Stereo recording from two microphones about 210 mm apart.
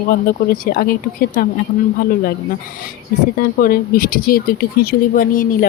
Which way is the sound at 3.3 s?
45° left (ahead or behind).